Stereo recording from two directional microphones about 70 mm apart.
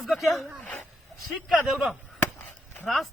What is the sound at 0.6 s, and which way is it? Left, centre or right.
Speech, left.